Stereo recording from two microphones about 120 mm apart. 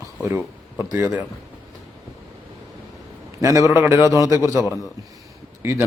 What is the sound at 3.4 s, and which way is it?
Speech, 30° right (ahead or behind).